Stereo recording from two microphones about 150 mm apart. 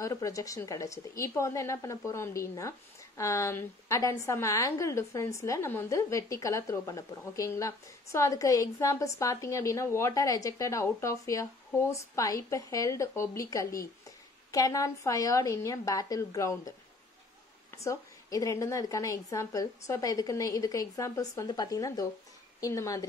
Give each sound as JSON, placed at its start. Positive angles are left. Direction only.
{"t": 0.0, "sound": "a woman's voice", "side_deg": 20}
{"t": 17.8, "sound": "a woman's voice", "side_deg": 20}